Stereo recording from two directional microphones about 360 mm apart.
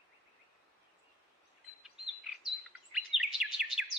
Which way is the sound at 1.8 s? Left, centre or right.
Centre.